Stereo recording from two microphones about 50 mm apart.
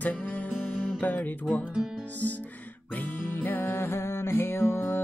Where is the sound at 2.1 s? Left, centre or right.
Left.